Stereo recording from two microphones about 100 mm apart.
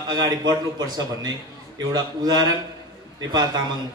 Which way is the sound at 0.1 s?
40° right (ahead or behind).